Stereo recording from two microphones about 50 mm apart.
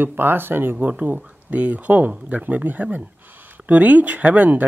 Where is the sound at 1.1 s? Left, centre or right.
Right.